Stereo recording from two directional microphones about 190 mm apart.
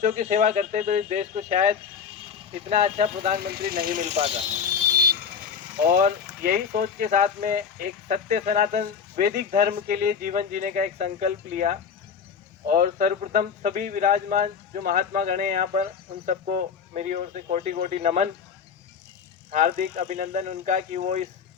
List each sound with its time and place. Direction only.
0.0 s speech: 40° right (ahead or behind)
5.9 s speech: 45° right (ahead or behind)
19.5 s speech: 40° right (ahead or behind)